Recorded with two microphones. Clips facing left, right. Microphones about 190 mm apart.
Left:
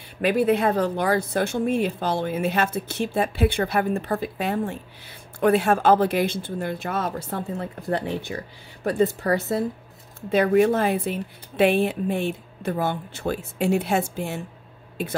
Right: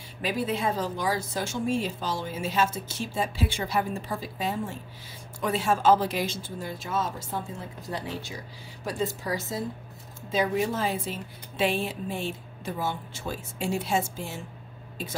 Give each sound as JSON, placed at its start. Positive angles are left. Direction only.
{"t": 0.2, "sound": "speech", "side_deg": 60}